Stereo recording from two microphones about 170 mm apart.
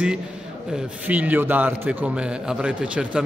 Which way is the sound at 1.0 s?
10° right (ahead or behind).